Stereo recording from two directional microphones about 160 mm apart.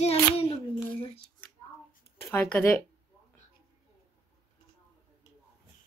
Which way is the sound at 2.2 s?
10° left (ahead or behind).